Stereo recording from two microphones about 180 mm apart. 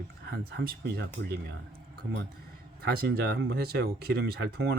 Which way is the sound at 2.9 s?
60° right (ahead or behind).